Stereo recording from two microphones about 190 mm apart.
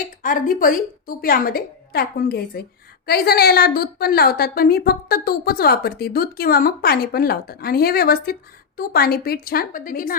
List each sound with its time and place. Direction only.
0.2 s a woman's voice: 45° left (ahead or behind)